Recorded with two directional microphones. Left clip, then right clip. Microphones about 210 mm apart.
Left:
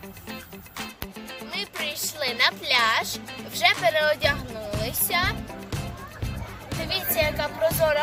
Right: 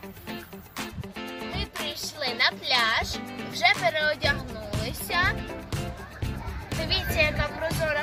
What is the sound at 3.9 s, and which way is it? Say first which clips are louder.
Speech: left 4 dB; 30° left (ahead or behind).